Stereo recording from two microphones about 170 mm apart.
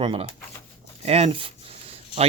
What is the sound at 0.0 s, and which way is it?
Speech, 30° right (ahead or behind).